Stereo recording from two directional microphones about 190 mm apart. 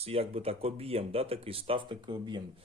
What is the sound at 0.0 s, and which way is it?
Speech, 30° right (ahead or behind).